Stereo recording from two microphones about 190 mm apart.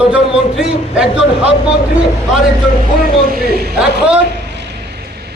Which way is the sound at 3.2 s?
50° right (ahead or behind).